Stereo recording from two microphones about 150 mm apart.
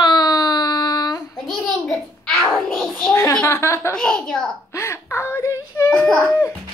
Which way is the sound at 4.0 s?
5° left (ahead or behind).